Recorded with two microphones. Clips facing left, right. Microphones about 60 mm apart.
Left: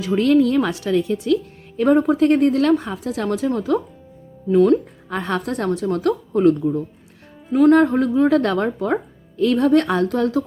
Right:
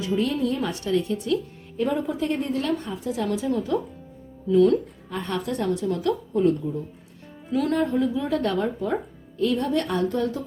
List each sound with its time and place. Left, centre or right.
0.0 s speech: left
1.7 s a woman's voice: left
4.4 s speech: left
5.1 s a woman's voice: left